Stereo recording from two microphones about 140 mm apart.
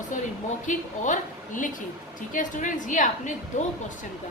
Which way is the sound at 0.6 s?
65° left (ahead or behind).